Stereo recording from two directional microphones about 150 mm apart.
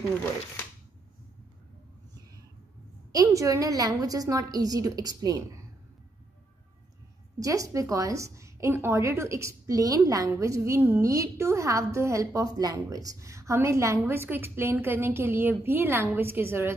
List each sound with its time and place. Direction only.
3.1 s a woman's voice: 25° right (ahead or behind)
7.3 s a woman's voice: 20° right (ahead or behind)